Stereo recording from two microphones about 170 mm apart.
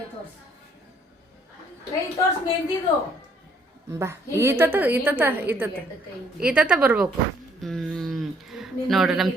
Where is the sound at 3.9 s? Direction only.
15° right (ahead or behind).